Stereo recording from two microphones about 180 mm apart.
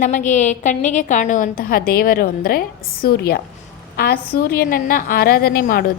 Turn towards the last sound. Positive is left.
turn(degrees=55)  # may be behind; listen again after turning